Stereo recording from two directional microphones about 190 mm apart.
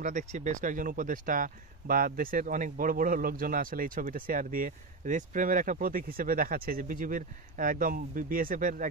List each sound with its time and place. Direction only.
0.0 s speech: 40° right (ahead or behind)